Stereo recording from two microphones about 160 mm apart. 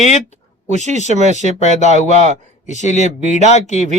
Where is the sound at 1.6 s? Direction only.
45° left (ahead or behind).